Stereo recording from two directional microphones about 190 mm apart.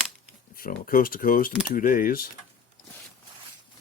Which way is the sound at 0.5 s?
50° left (ahead or behind).